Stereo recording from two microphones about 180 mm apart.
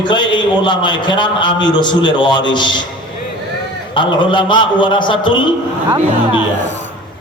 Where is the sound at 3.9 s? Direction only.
25° left (ahead or behind).